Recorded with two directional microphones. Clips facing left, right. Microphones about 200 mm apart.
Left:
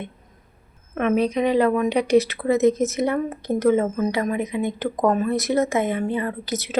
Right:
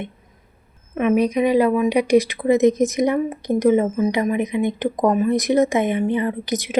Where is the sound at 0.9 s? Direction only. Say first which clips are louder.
Right 3 dB; 10° right (ahead or behind).